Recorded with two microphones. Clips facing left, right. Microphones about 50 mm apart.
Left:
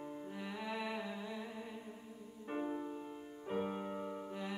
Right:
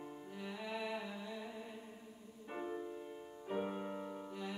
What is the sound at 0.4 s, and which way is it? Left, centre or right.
Music, centre.